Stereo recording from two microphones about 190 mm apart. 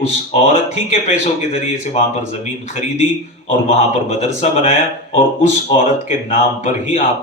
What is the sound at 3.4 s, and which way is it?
Speech, 35° left (ahead or behind).